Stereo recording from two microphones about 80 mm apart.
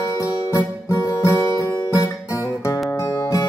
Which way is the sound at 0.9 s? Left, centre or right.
Left.